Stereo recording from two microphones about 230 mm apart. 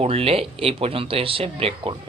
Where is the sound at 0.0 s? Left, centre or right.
Right.